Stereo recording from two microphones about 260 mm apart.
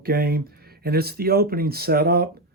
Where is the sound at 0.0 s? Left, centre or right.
Right.